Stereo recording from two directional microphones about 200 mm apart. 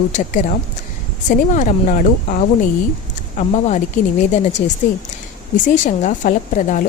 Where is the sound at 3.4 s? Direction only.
35° left (ahead or behind).